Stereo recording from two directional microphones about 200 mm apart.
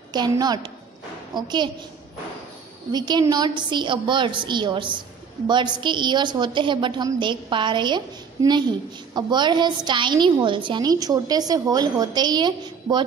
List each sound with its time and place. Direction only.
0.1 s a woman's voice: 20° right (ahead or behind)
2.9 s a woman's voice: 20° right (ahead or behind)